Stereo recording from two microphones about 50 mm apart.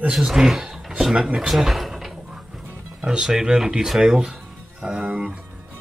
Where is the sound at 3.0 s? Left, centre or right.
Centre.